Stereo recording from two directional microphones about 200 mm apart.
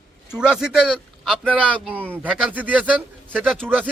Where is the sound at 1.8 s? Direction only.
10° right (ahead or behind).